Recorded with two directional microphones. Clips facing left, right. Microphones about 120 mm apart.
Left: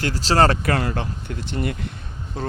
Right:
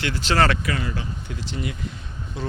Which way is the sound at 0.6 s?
55° left (ahead or behind).